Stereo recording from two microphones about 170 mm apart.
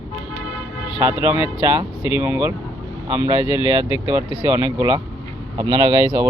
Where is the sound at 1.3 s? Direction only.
30° left (ahead or behind).